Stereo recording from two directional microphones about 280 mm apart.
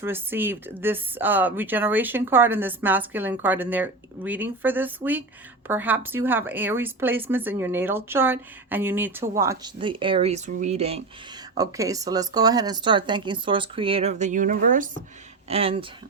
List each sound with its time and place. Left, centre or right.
0.0 s speech: centre